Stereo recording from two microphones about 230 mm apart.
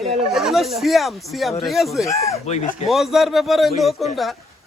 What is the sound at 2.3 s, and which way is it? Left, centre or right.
Speech, left.